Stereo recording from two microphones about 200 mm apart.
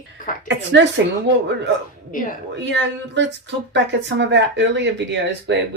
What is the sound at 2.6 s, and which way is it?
Speech, 60° right (ahead or behind).